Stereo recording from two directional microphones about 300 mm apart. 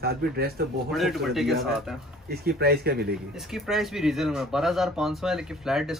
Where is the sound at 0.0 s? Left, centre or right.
Right.